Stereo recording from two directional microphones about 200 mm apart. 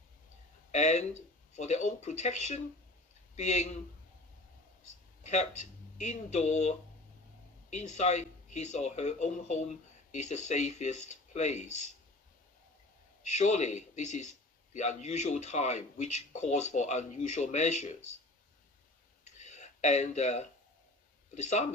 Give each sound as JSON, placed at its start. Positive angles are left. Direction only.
{"t": 0.7, "sound": "speech", "side_deg": 35}
{"t": 5.2, "sound": "speech", "side_deg": 35}
{"t": 13.2, "sound": "speech", "side_deg": 35}
{"t": 19.3, "sound": "a sound", "side_deg": 35}